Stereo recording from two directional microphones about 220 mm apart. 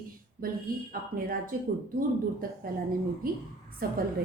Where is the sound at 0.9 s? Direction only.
40° right (ahead or behind).